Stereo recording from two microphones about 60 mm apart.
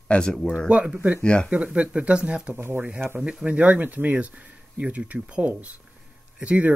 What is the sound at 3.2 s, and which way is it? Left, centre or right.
Speech, centre.